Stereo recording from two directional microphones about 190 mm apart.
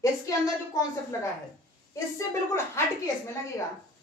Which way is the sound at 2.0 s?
15° left (ahead or behind).